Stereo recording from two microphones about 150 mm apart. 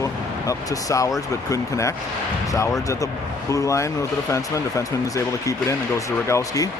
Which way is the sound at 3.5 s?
20° left (ahead or behind).